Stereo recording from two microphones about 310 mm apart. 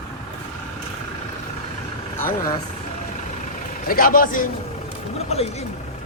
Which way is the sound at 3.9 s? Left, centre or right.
Left.